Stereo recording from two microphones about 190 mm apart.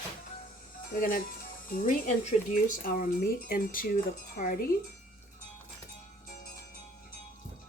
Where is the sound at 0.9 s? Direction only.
50° left (ahead or behind).